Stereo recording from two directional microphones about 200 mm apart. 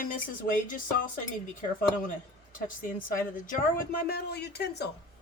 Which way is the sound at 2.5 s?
45° left (ahead or behind).